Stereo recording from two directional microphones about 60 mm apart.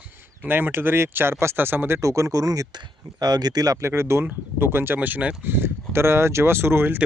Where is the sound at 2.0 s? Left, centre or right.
Right.